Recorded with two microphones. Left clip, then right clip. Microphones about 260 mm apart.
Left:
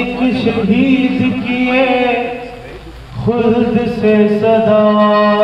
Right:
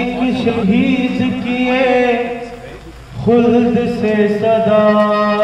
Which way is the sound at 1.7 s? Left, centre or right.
Right.